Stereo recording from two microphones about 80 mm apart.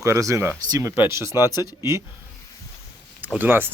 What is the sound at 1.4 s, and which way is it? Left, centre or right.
Speech, left.